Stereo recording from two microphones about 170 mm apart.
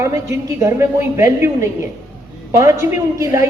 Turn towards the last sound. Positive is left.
turn(degrees=-20)  # may be behind; listen again after turning